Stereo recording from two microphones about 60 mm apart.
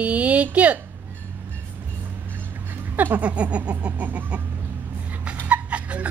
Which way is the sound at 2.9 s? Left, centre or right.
Right.